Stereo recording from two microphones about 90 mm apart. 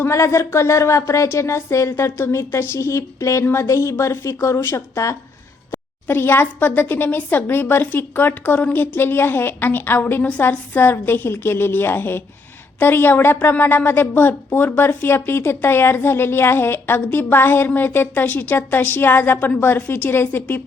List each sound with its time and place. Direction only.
0.0 s speech: 30° left (ahead or behind)
6.1 s speech: 25° left (ahead or behind)